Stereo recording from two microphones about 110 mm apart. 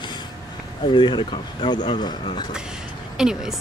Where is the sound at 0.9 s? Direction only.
45° left (ahead or behind).